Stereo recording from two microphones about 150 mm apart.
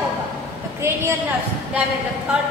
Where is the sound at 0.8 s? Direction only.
15° right (ahead or behind).